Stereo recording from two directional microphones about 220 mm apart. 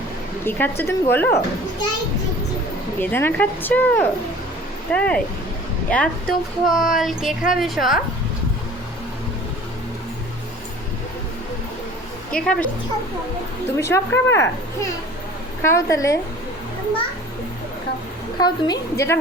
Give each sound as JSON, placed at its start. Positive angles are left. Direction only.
{"t": 0.4, "sound": "a woman's voice", "side_deg": 10}
{"t": 3.0, "sound": "a woman's voice", "side_deg": 10}
{"t": 12.3, "sound": "speech", "side_deg": 5}
{"t": 13.7, "sound": "a woman's voice", "side_deg": 10}
{"t": 18.3, "sound": "a woman's voice", "side_deg": 20}